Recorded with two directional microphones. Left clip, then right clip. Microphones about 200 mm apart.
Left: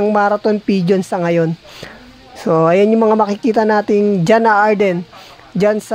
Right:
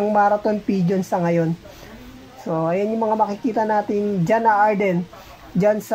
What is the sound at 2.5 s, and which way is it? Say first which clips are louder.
Speech: left 10 dB; 55° left (ahead or behind).